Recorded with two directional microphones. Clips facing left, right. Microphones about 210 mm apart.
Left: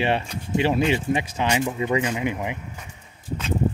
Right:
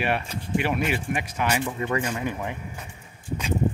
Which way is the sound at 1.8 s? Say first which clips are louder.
Left 3 dB; 10° left (ahead or behind).